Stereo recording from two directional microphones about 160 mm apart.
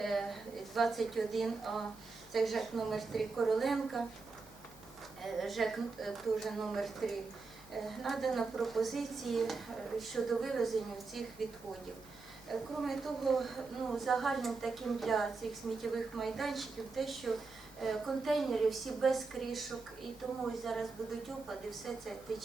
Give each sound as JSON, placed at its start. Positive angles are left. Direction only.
{"t": 0.0, "sound": "a sound", "side_deg": 0}
{"t": 2.3, "sound": "a woman's voice", "side_deg": 0}
{"t": 5.2, "sound": "a woman's voice", "side_deg": 0}
{"t": 12.5, "sound": "a woman's voice", "side_deg": 0}